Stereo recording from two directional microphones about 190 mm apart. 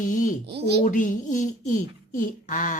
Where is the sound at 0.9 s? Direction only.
45° left (ahead or behind).